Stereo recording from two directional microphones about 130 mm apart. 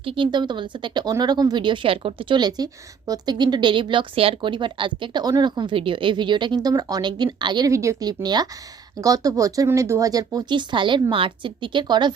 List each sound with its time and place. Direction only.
0.0 s speech: 40° right (ahead or behind)